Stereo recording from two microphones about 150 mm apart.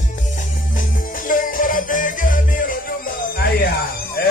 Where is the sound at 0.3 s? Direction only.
60° left (ahead or behind).